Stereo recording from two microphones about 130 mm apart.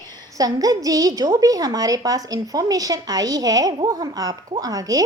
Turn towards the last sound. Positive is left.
turn(degrees=-25)  # may be behind; listen again after turning